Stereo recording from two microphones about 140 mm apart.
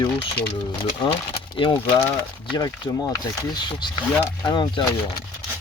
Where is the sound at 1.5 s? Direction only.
35° left (ahead or behind).